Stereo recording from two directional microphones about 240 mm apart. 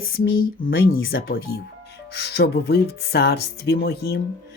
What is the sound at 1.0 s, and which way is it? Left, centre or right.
Speech, left.